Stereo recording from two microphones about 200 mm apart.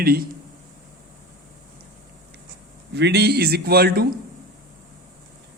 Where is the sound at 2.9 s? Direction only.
55° right (ahead or behind).